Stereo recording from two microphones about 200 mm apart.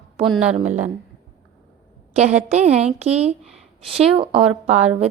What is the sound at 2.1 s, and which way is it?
A woman's voice, 35° right (ahead or behind).